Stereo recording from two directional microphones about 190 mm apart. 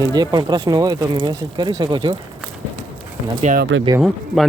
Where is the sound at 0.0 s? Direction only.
20° right (ahead or behind).